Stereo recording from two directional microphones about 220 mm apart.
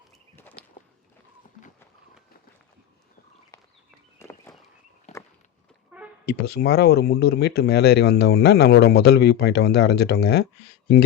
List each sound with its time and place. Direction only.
0.3 s walk: 10° left (ahead or behind)
4.2 s walk: 10° left (ahead or behind)
5.1 s walk: 30° left (ahead or behind)
5.9 s brass instrument: 5° right (ahead or behind)
6.2 s speech: 45° left (ahead or behind)